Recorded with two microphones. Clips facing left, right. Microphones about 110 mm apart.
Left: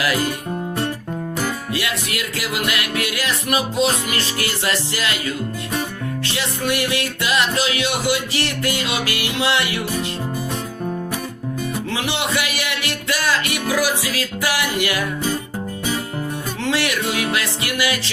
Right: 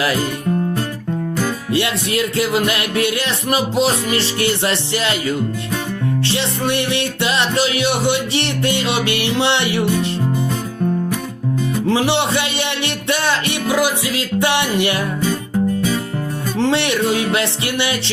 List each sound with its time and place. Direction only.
1.7 s music: 30° right (ahead or behind)
6.2 s music: 30° right (ahead or behind)
11.9 s music: 35° right (ahead or behind)
16.6 s music: 30° right (ahead or behind)